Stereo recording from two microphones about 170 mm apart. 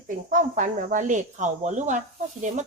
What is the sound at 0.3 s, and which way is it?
Speech, 50° right (ahead or behind).